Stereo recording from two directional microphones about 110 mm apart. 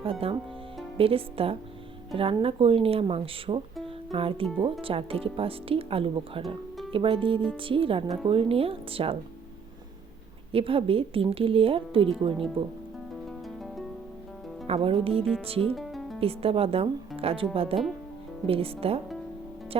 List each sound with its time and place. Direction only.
0.0 s speech: 55° right (ahead or behind)
3.8 s music: 60° right (ahead or behind)
4.8 s speech: 55° right (ahead or behind)
10.5 s speech: 55° right (ahead or behind)
13.2 s music: centre (ahead or behind)
14.7 s speech: 60° right (ahead or behind)
15.7 s music: centre (ahead or behind)
16.2 s speech: 60° right (ahead or behind)